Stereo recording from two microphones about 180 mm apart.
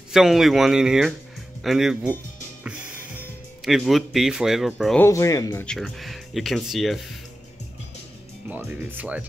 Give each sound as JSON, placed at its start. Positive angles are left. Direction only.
{"t": 0.1, "sound": "speech", "side_deg": 0}
{"t": 3.6, "sound": "speech", "side_deg": 0}
{"t": 5.0, "sound": "speech", "side_deg": 15}
{"t": 5.7, "sound": "speech", "side_deg": 0}
{"t": 8.5, "sound": "speech", "side_deg": -10}